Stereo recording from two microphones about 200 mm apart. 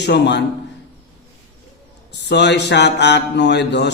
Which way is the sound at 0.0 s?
60° left (ahead or behind).